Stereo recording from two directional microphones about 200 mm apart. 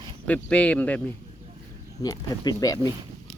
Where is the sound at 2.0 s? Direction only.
20° left (ahead or behind).